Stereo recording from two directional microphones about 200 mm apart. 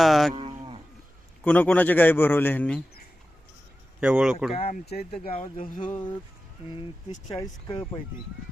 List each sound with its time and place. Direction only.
0.0 s cattle: centre (ahead or behind)
0.3 s moo: 25° right (ahead or behind)
1.5 s a man's voice: 5° left (ahead or behind)
4.0 s speech: 5° right (ahead or behind)
4.5 s speech: 30° left (ahead or behind)
4.9 s speech: 50° left (ahead or behind)
5.3 s speech: 30° left (ahead or behind)
5.6 s speech: 40° left (ahead or behind)
6.7 s speech: 25° left (ahead or behind)
7.3 s a man's voice: 15° left (ahead or behind)